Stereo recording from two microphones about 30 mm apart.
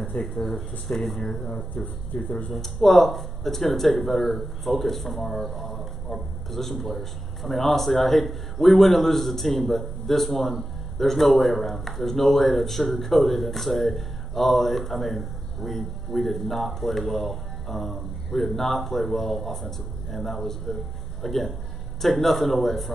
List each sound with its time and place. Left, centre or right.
0.1 s speech: left
1.2 s speech: centre